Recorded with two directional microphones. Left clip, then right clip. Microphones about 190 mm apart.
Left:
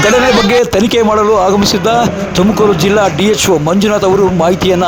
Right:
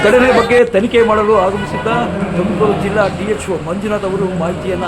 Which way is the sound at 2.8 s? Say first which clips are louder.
Left 5 dB; 50° left (ahead or behind).